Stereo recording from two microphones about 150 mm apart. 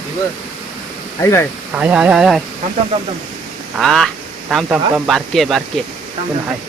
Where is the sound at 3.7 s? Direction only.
Centre (ahead or behind).